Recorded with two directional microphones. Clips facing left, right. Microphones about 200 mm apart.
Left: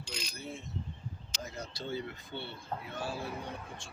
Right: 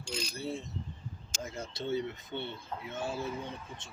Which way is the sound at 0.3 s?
35° right (ahead or behind).